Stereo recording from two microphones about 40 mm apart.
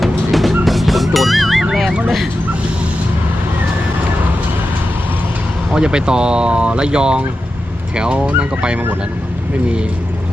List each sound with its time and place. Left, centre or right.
0.0 s music: centre
1.9 s a sound: centre
5.7 s speech: right